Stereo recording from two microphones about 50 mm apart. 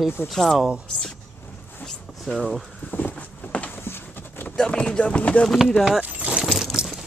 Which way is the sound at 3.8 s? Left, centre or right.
Left.